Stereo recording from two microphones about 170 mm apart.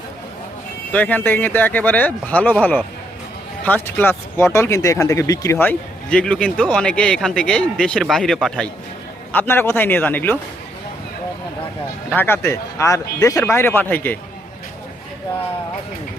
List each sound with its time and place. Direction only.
0.9 s speech: 10° left (ahead or behind)
12.1 s speech: 15° left (ahead or behind)